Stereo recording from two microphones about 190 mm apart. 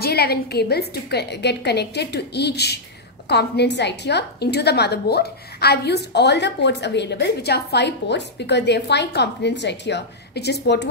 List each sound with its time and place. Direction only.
0.0 s a woman's voice: 55° left (ahead or behind)